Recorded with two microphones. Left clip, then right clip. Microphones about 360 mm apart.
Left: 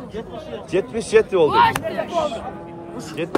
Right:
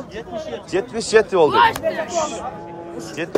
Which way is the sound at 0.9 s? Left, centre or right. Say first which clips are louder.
Right 1 dB; centre.